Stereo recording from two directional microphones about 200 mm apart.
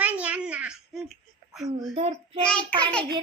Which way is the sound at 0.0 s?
5° right (ahead or behind).